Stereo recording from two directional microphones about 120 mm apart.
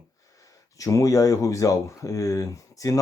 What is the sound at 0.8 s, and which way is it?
Speech, 30° left (ahead or behind).